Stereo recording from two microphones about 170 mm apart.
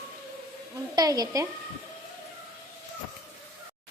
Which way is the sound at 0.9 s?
20° right (ahead or behind).